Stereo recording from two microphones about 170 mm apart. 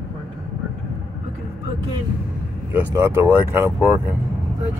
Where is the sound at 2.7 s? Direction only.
15° right (ahead or behind).